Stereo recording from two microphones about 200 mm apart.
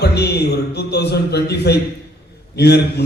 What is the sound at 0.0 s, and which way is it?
A man's voice, 55° left (ahead or behind).